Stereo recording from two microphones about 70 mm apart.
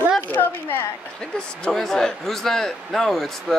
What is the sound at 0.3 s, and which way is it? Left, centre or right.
Speech, left.